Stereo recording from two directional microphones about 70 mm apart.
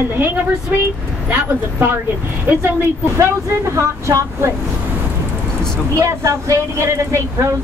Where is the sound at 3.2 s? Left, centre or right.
Right.